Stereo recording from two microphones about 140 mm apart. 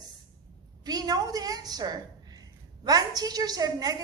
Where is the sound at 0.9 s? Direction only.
30° right (ahead or behind).